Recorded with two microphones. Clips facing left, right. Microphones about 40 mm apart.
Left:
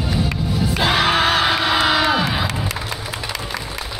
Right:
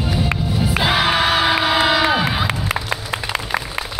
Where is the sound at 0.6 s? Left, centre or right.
Centre.